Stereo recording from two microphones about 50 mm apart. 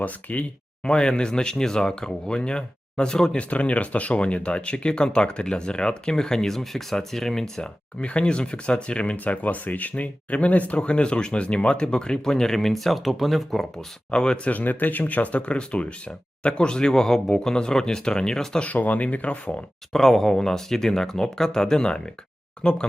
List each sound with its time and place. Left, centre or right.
0.0 s speech: left
0.9 s speech: centre
3.3 s speech: left; by 13.7 s centre
14.1 s speech: centre
14.5 s speech: left; by 18.6 s centre
18.6 s speech: left
19.9 s speech: centre